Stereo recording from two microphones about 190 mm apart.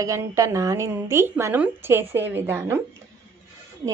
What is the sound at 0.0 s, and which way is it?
A woman's voice, 15° right (ahead or behind).